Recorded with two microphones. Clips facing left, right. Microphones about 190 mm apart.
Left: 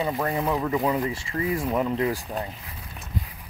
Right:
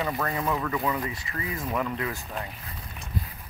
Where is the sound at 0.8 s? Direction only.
30° left (ahead or behind).